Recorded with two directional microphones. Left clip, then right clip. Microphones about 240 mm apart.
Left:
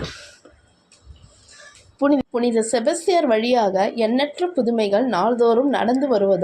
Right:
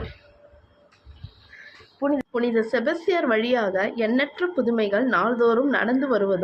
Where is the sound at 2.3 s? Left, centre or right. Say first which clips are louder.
Left 3 dB; centre.